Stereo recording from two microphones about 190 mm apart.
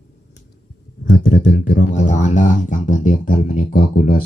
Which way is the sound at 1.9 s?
40° left (ahead or behind).